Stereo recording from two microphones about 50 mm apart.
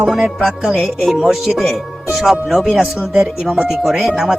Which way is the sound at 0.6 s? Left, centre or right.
Centre.